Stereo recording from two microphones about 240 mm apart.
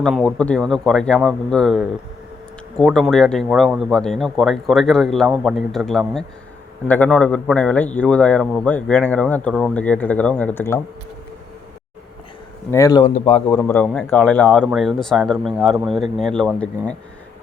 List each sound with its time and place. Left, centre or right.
0.0 s a man's voice: centre
12.7 s a man's voice: centre
13.5 s a man's voice: centre